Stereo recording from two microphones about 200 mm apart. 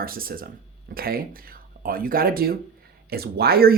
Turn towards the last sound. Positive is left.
turn(degrees=-50)  # may be behind; listen again after turning